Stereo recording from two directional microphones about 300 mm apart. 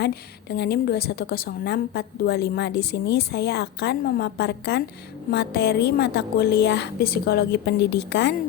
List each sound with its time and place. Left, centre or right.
0.0 s a woman's voice: left